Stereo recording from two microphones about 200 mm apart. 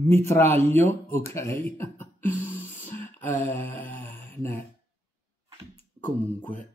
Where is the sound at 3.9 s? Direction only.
10° left (ahead or behind).